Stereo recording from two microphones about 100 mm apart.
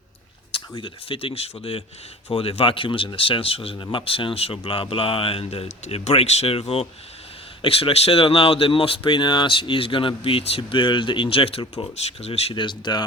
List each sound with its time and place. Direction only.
0.7 s speech: 55° left (ahead or behind); by 11.6 s 75° left (ahead or behind)
11.7 s speech: 90° left
12.5 s speech: 50° left (ahead or behind)